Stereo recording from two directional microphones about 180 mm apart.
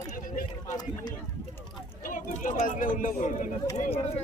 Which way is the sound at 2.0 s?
50° left (ahead or behind).